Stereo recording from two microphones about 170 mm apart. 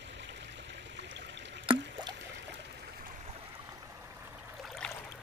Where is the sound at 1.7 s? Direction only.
30° right (ahead or behind).